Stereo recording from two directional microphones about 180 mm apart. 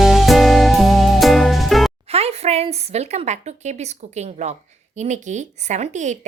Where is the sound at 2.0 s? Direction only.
35° right (ahead or behind).